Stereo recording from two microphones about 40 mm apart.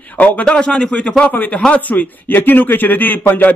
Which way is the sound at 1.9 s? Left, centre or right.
Left.